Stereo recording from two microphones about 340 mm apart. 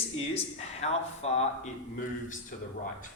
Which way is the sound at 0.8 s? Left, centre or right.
Centre.